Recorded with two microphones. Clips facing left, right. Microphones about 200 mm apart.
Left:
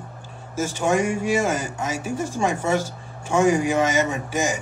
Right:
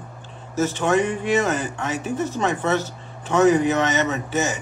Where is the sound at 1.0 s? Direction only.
45° left (ahead or behind).